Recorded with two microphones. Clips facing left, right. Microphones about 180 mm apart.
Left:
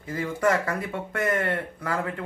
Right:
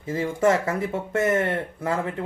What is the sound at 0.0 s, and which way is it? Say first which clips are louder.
Speech: right 3 dB; 25° right (ahead or behind).